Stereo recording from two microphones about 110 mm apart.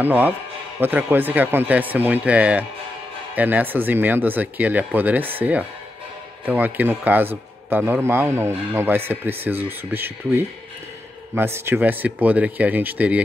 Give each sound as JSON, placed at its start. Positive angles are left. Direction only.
{"t": 0.0, "sound": "a man's voice", "side_deg": -15}